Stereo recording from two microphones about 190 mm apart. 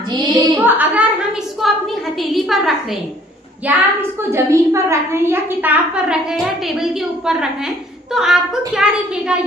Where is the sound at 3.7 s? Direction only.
10° right (ahead or behind).